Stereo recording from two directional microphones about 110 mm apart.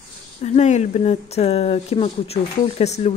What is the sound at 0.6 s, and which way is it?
A woman's voice, 90° left.